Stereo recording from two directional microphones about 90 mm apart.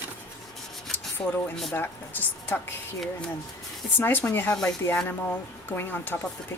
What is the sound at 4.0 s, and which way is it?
Speech, 20° left (ahead or behind).